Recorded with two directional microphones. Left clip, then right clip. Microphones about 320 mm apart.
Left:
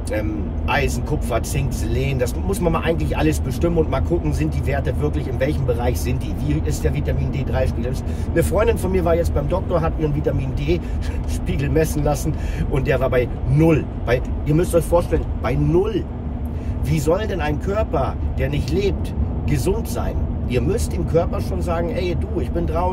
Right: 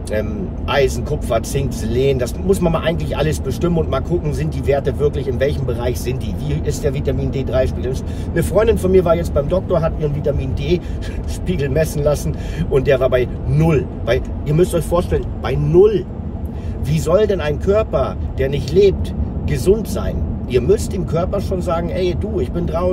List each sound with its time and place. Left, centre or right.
0.7 s speech: centre
11.4 s speech: centre